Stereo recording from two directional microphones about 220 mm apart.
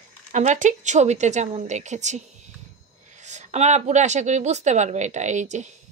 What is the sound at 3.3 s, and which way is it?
Speech, 30° right (ahead or behind).